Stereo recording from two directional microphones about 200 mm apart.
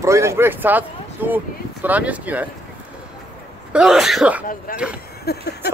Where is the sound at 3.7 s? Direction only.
Centre (ahead or behind).